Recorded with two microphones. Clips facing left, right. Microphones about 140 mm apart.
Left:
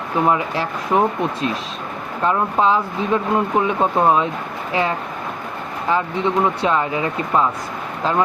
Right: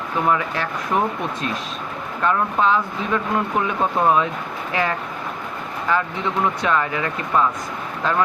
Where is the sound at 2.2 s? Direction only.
25° left (ahead or behind).